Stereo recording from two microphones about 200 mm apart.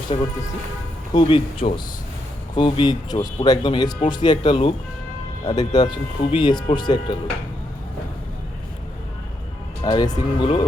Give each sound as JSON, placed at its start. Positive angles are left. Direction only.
{"t": 0.1, "sound": "speech", "side_deg": 30}
{"t": 9.8, "sound": "speech", "side_deg": 20}